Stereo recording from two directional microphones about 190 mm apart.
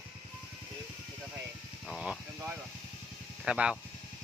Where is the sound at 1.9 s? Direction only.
5° right (ahead or behind).